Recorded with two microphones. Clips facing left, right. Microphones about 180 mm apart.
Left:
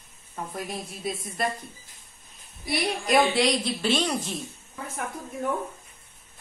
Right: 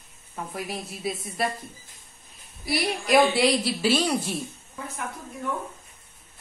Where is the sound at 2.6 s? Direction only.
Centre (ahead or behind).